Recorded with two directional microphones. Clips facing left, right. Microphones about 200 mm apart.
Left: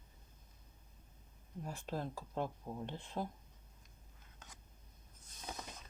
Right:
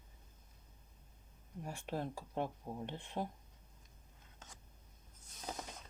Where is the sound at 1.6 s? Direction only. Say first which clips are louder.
Right 1 dB; 15° right (ahead or behind).